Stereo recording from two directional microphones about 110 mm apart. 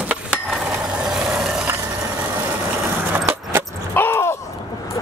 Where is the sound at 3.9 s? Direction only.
20° left (ahead or behind).